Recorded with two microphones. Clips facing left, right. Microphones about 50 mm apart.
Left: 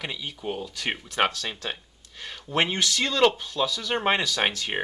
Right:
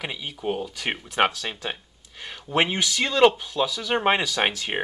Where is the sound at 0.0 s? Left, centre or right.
Centre.